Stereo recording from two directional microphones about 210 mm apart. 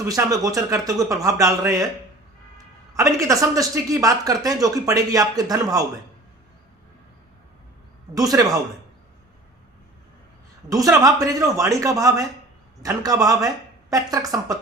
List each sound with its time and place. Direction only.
0.1 s speech: 15° right (ahead or behind)
2.9 s speech: 15° right (ahead or behind)
8.1 s speech: 15° right (ahead or behind)
10.7 s speech: 15° right (ahead or behind)